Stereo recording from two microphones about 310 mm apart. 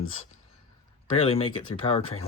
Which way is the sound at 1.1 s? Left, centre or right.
Centre.